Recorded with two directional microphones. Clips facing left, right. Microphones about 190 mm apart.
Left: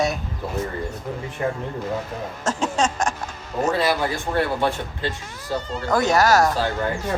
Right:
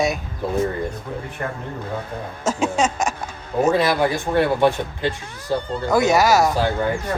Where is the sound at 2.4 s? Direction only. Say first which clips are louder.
Right 2 dB; 10° right (ahead or behind).